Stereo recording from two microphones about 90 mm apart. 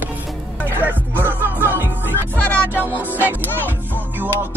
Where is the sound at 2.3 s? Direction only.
20° left (ahead or behind).